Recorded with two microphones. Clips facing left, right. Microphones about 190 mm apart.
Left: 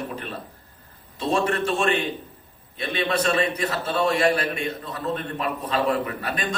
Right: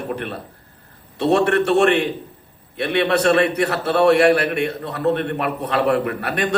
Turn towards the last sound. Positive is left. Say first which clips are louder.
# right 6 dB
turn(degrees=-65)  # may be behind; listen again after turning